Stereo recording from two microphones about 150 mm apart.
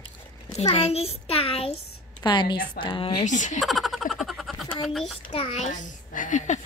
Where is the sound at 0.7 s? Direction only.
45° left (ahead or behind).